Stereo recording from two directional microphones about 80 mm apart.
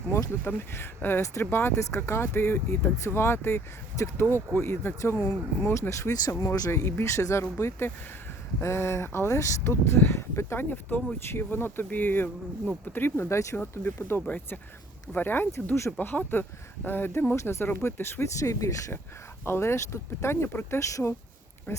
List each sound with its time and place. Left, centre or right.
0.4 s speech: left
1.2 s speech: left
1.5 s speech: left
5.9 s speech: left
13.6 s speech: left
19.5 s speech: left